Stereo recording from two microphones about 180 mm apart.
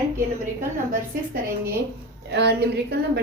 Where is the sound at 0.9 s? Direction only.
50° right (ahead or behind).